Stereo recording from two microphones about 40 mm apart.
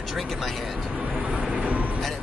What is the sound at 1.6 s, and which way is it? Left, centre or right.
Vehicle, right.